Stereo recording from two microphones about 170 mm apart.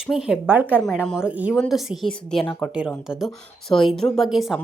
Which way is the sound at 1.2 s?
10° right (ahead or behind).